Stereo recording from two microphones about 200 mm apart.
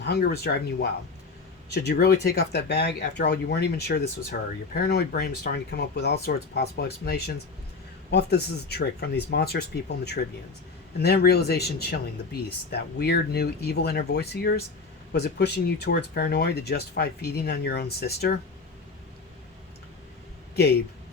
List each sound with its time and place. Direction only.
0.0 s speech: 55° left (ahead or behind)